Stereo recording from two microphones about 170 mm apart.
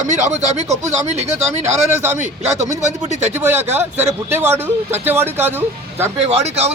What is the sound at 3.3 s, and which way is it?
Speech, 15° right (ahead or behind).